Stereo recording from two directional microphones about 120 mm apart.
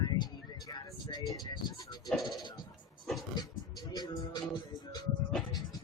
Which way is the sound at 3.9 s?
35° left (ahead or behind).